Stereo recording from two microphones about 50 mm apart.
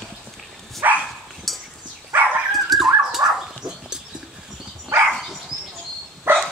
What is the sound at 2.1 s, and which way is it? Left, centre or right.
Dog, right.